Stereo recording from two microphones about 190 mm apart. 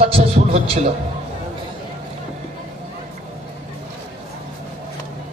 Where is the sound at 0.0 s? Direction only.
30° right (ahead or behind).